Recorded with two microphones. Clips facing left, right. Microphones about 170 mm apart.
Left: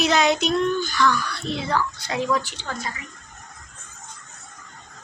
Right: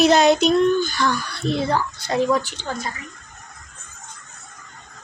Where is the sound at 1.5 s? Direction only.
45° right (ahead or behind).